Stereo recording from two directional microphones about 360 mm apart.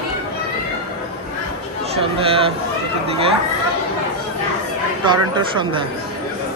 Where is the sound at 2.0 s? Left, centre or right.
Centre.